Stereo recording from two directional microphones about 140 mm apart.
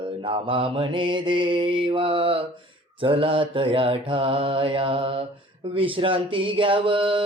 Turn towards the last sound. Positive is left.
turn(degrees=-35)  # may be behind; listen again after turning